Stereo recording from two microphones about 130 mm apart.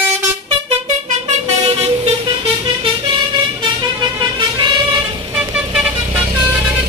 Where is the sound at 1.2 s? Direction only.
55° right (ahead or behind).